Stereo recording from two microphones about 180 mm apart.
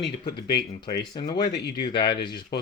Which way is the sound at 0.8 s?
25° left (ahead or behind).